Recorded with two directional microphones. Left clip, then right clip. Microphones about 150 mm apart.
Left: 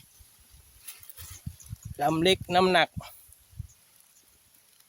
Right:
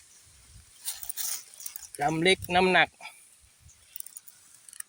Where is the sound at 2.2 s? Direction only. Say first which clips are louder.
Even; 35° left (ahead or behind).